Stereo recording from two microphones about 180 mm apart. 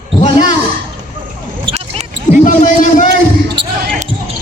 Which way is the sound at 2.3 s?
45° left (ahead or behind).